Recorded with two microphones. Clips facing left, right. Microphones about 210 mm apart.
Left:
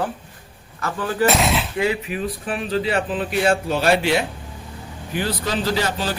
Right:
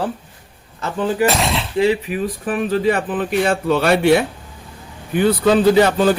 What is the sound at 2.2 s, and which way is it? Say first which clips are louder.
Speech: right 7 dB; 50° right (ahead or behind).